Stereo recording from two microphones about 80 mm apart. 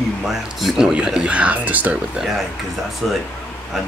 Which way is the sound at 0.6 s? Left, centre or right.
Centre.